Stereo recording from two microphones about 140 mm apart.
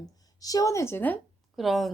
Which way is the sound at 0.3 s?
25° left (ahead or behind).